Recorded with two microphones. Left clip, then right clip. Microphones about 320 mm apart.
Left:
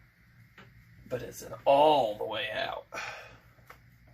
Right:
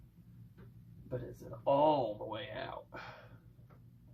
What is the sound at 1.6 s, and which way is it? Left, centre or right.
Speech, left.